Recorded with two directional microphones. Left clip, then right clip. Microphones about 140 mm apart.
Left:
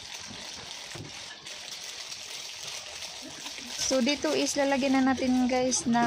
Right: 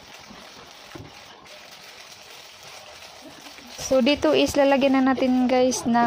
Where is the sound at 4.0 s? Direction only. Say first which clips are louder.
Right 11 dB; 25° right (ahead or behind).